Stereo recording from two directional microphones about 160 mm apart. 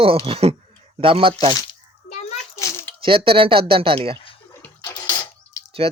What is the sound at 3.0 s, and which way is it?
Speech, 35° right (ahead or behind).